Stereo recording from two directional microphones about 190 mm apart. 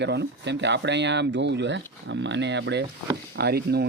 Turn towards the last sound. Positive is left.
turn(degrees=-55)  # may be behind; listen again after turning